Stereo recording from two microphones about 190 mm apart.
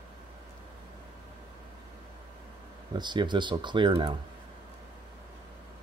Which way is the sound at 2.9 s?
25° right (ahead or behind).